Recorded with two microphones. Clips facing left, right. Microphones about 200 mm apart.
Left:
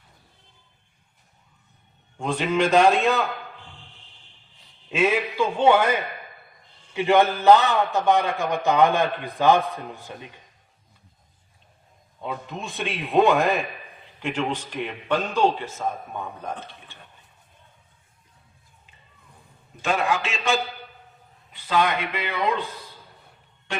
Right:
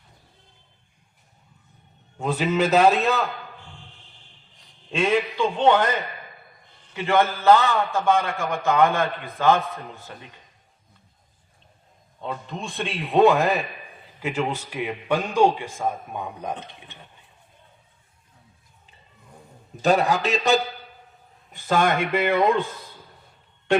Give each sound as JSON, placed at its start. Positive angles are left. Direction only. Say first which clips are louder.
{"t": 2.1, "sound": "a man's voice", "louder": "right 1 dB", "side_deg": -5}
{"t": 4.9, "sound": "a man's voice", "louder": "even", "side_deg": 5}
{"t": 12.2, "sound": "a man's voice", "louder": "even", "side_deg": 5}
{"t": 19.8, "sound": "a man's voice", "louder": "right 4 dB", "side_deg": -40}